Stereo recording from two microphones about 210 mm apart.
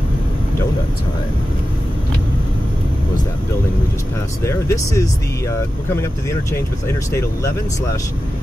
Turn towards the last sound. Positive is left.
turn(degrees=10)  # may be behind; listen again after turning